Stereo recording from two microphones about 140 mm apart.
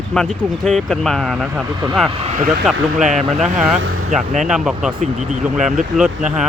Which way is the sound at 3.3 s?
Centre (ahead or behind).